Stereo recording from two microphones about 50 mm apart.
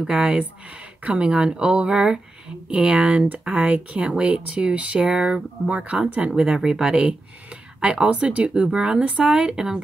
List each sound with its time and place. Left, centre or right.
0.0 s speech: centre
8.6 s speech: centre